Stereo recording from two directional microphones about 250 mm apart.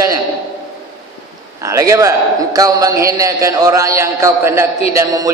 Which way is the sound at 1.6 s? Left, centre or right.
Centre.